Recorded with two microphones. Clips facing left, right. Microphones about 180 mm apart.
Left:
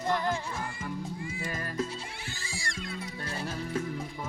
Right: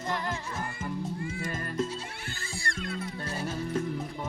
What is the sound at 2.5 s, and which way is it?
Music, 55° right (ahead or behind).